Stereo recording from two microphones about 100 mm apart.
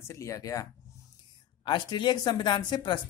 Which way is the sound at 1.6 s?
50° left (ahead or behind).